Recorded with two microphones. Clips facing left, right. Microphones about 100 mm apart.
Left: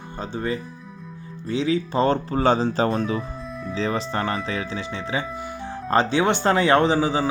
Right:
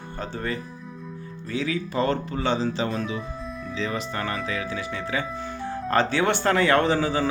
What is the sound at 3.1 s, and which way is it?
Music, centre (ahead or behind).